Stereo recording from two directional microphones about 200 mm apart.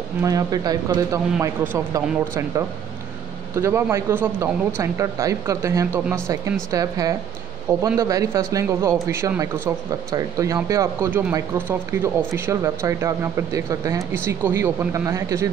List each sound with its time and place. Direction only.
0.2 s speech: 15° right (ahead or behind)